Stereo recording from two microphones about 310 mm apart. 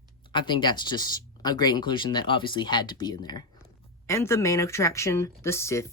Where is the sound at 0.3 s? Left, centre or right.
Centre.